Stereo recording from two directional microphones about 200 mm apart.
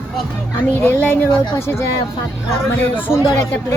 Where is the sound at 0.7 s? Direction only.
10° left (ahead or behind).